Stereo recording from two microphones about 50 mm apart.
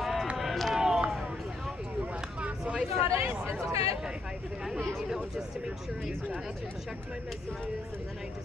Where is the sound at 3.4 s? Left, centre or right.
Right.